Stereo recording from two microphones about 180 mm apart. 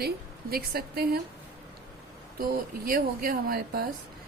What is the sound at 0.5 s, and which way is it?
Speech, 60° right (ahead or behind).